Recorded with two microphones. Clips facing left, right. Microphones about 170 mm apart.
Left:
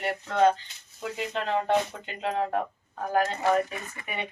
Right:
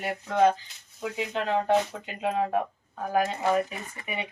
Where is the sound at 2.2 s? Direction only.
10° right (ahead or behind).